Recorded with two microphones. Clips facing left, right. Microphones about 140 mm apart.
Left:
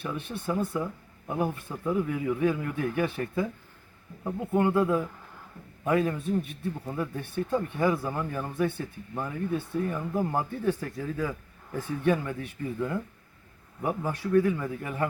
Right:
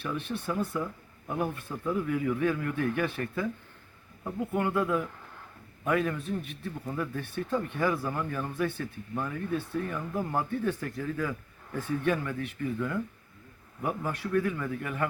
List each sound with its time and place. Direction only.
0.0 s a man's voice: 20° left (ahead or behind)